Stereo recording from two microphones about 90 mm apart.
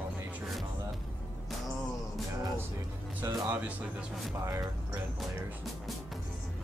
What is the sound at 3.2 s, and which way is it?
Speech, 20° right (ahead or behind).